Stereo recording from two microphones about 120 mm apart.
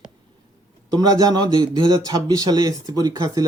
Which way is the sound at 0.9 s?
35° right (ahead or behind).